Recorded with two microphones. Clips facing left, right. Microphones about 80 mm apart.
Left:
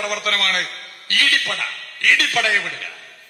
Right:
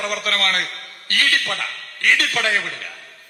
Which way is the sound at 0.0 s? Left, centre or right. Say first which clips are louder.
Even; right.